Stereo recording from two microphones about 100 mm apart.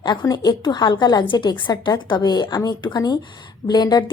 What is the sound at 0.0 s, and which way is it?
A woman's voice, 45° left (ahead or behind).